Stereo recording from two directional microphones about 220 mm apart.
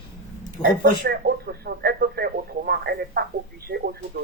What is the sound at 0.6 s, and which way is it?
Speech, 20° left (ahead or behind).